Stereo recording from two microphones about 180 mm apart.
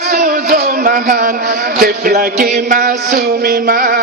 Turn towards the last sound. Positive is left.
turn(degrees=-55)  # may be behind; listen again after turning